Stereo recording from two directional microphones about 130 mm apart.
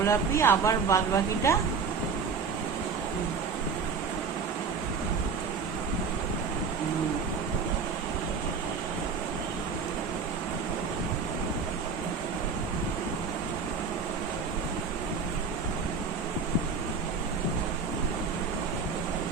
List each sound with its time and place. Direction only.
0.0 s speech: 20° left (ahead or behind)